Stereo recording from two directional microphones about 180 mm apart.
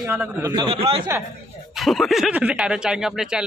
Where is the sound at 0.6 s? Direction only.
30° right (ahead or behind).